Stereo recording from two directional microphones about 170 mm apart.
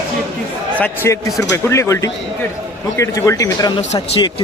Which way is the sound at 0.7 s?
10° left (ahead or behind).